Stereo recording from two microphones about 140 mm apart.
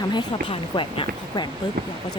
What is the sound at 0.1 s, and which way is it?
Speech, 35° left (ahead or behind).